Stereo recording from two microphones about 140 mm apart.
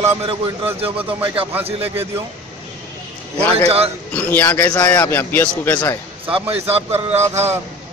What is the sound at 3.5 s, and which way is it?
Speech, 45° right (ahead or behind).